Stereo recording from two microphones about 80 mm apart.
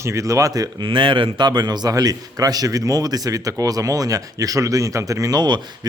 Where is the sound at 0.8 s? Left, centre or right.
Right.